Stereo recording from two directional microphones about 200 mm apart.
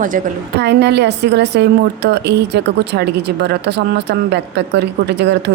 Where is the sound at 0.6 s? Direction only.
60° right (ahead or behind).